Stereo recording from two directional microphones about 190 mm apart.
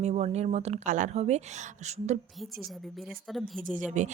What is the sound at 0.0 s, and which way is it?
A woman's voice, 35° right (ahead or behind).